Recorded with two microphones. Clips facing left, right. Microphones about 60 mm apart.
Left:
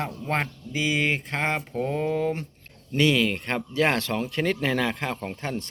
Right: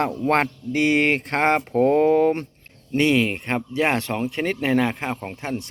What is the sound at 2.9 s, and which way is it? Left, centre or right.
Speech, right.